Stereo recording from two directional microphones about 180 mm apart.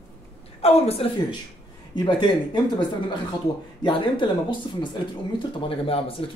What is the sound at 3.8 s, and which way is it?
Speech, 25° left (ahead or behind).